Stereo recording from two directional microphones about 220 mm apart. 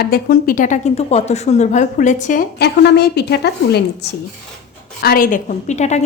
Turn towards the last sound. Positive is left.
turn(degrees=30)  # may be behind; listen again after turning